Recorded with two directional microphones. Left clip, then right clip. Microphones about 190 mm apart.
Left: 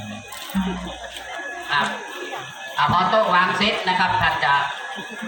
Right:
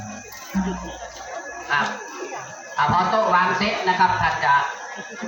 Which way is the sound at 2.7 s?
15° left (ahead or behind).